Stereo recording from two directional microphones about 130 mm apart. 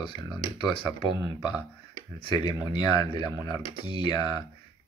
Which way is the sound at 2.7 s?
35° left (ahead or behind).